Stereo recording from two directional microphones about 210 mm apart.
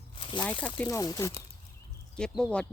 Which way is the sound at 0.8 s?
15° left (ahead or behind).